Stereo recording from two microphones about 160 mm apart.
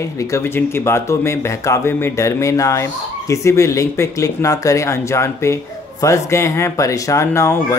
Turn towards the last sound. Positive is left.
turn(degrees=20)  # may be behind; listen again after turning